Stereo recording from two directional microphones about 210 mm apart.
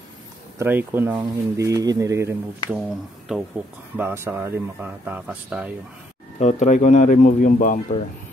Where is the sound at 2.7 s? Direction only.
5° right (ahead or behind).